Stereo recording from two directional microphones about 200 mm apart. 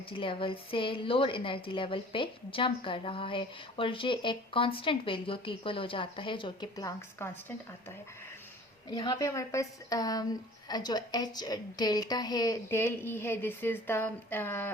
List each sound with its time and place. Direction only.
0.1 s a woman's voice: 25° left (ahead or behind); by 14.7 s 10° left (ahead or behind)